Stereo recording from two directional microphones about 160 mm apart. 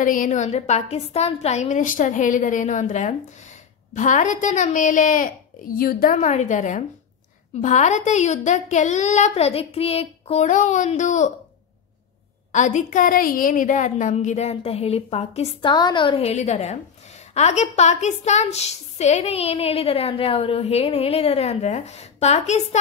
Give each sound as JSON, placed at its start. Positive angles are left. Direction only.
{"t": 0.0, "sound": "a woman's voice", "side_deg": 55}
{"t": 5.8, "sound": "a woman's voice", "side_deg": 70}
{"t": 6.1, "sound": "a woman's voice", "side_deg": 45}
{"t": 12.5, "sound": "a woman's voice", "side_deg": 50}
{"t": 15.7, "sound": "a woman's voice", "side_deg": 30}